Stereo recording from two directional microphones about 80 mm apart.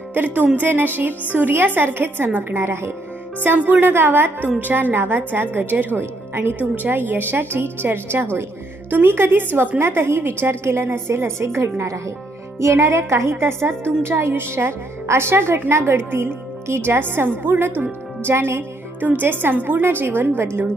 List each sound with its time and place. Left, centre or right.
0.1 s a woman's voice: right
18.3 s music: right
19.2 s a woman's voice: right